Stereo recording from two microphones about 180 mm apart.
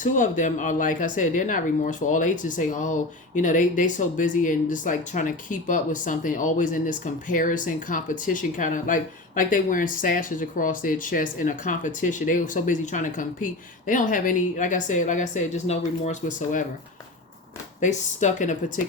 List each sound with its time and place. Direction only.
0.0 s speech: 45° left (ahead or behind)
17.7 s speech: 45° left (ahead or behind)